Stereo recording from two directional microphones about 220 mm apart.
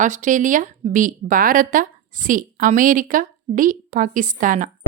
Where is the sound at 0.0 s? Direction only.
35° right (ahead or behind).